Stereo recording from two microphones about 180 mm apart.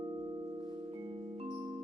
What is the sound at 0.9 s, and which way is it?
Music, 30° right (ahead or behind).